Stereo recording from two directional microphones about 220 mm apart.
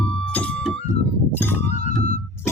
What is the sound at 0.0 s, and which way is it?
Music, 5° left (ahead or behind).